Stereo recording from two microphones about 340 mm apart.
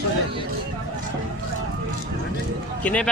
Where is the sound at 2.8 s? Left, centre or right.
Centre.